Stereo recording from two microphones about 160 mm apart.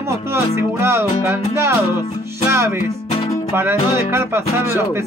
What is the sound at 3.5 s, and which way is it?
Music, 15° right (ahead or behind).